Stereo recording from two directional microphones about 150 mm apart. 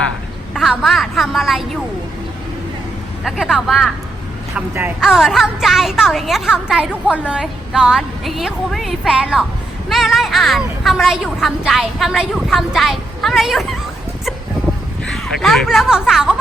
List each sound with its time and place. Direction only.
0.5 s a woman's voice: centre (ahead or behind)
3.2 s a woman's voice: centre (ahead or behind)
15.0 s a woman's voice: centre (ahead or behind)